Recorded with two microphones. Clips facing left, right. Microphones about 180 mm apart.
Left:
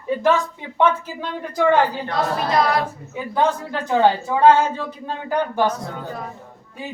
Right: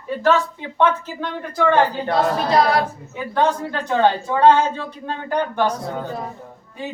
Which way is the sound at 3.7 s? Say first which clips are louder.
Left 1 dB; 10° left (ahead or behind).